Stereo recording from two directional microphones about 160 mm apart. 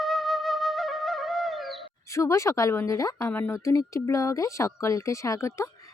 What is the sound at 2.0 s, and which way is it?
A woman's voice, 20° left (ahead or behind).